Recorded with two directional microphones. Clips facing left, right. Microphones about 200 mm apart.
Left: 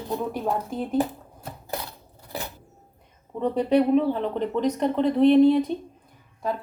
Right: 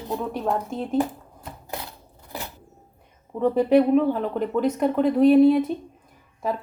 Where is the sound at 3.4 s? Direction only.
10° right (ahead or behind).